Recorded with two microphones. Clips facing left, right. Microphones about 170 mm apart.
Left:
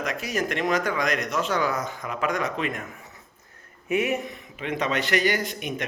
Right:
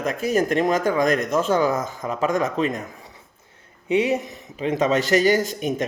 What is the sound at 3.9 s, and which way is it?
Speech, 30° right (ahead or behind).